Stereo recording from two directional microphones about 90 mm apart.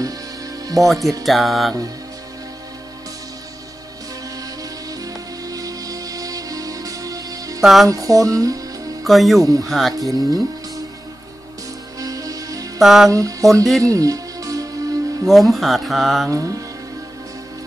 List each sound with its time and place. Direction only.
0.8 s music: 35° right (ahead or behind)
1.2 s speech: centre (ahead or behind)
5.0 s music: 40° right (ahead or behind)
7.6 s speech: centre (ahead or behind)
7.9 s music: 40° right (ahead or behind)
9.0 s speech: centre (ahead or behind)
9.4 s music: 40° right (ahead or behind)
9.7 s speech: centre (ahead or behind)
9.9 s music: 40° right (ahead or behind)
12.0 s music: 40° right (ahead or behind)
12.8 s speech: centre (ahead or behind)
13.1 s music: 40° right (ahead or behind)
15.2 s speech: centre (ahead or behind)
16.3 s music: 35° right (ahead or behind)